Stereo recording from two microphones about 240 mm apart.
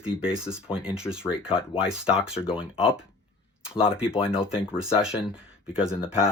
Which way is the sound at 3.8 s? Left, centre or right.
Left.